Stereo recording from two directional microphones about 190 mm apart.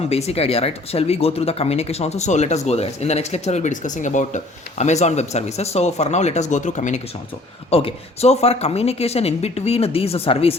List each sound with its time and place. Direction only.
0.0 s a woman's voice: 35° left (ahead or behind)